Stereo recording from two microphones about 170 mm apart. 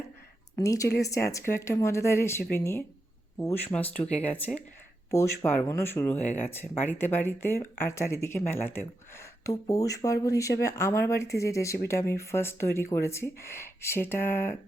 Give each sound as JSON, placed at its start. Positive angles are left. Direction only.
{"t": 0.5, "sound": "speech", "side_deg": 20}